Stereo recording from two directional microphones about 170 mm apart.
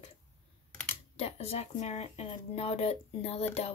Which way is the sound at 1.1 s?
40° left (ahead or behind).